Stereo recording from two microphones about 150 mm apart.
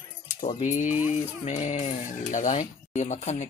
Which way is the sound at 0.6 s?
55° left (ahead or behind).